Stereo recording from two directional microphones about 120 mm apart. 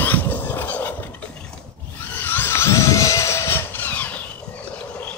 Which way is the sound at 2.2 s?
20° left (ahead or behind).